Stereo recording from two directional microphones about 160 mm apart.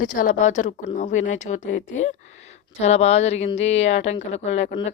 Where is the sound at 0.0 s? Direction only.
55° left (ahead or behind).